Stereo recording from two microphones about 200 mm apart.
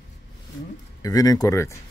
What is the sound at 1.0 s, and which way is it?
Speech, 15° left (ahead or behind).